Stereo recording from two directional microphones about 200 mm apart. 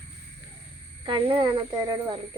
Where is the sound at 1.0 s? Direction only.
25° right (ahead or behind).